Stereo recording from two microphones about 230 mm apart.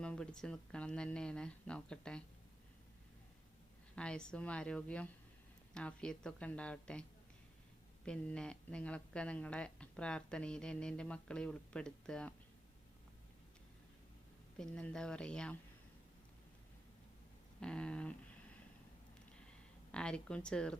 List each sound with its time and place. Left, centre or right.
0.0 s speech: centre
3.9 s speech: centre
8.0 s speech: centre
14.6 s speech: centre
17.6 s speech: centre
19.9 s speech: centre